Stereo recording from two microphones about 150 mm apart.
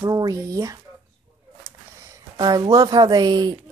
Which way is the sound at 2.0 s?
25° right (ahead or behind).